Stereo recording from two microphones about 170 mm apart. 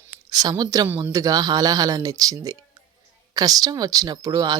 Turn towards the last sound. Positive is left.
turn(degrees=-20)  # may be behind; listen again after turning